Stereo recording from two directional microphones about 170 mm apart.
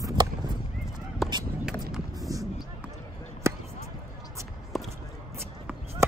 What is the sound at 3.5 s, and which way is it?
Basketball bounce, 15° right (ahead or behind).